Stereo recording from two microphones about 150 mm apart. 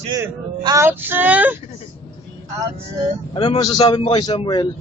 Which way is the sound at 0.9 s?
15° right (ahead or behind).